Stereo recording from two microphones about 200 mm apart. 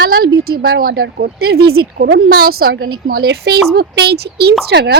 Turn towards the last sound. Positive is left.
turn(degrees=-55)  # may be behind; listen again after turning